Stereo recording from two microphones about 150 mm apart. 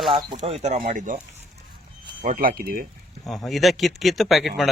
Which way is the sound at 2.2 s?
70° right (ahead or behind).